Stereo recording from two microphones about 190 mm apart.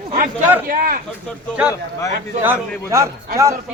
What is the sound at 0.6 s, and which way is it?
Speech, 50° right (ahead or behind).